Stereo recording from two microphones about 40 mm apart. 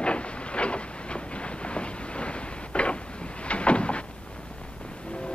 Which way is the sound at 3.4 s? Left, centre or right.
Left.